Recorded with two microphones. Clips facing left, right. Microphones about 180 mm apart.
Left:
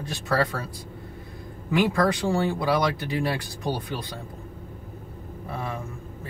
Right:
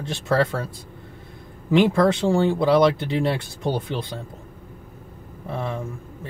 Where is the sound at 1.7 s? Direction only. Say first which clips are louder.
Right 5 dB; 25° right (ahead or behind).